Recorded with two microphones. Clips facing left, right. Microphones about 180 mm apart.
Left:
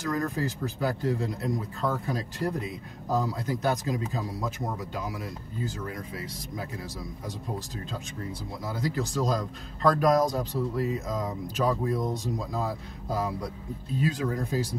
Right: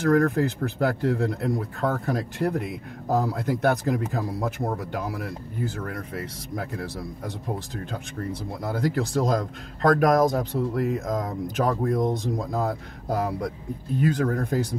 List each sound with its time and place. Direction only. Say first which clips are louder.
0.0 s speech: right 9 dB; 60° right (ahead or behind)
8.6 s speech: right 5 dB; 60° right (ahead or behind)